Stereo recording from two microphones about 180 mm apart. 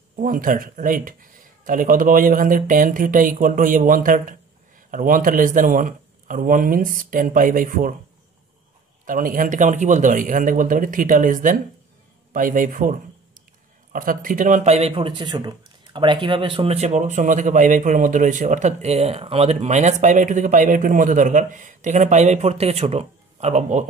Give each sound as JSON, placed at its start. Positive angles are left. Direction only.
{"t": 0.1, "sound": "speech", "side_deg": -50}
{"t": 9.0, "sound": "speech", "side_deg": -50}
{"t": 13.9, "sound": "speech", "side_deg": -50}